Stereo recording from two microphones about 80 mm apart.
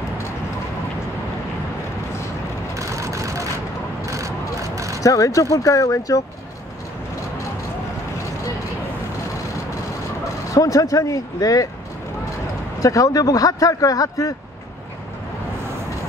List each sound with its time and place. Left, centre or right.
2.7 s vehicle: right
5.0 s speech: left
10.5 s speech: left
12.8 s speech: left